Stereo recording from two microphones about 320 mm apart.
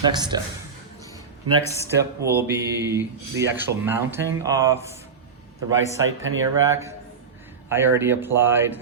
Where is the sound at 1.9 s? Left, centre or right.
Centre.